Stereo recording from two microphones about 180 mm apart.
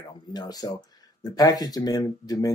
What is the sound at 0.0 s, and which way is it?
Speech, 20° left (ahead or behind).